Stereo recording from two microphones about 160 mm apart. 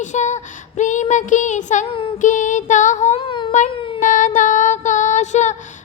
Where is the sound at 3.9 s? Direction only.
55° left (ahead or behind).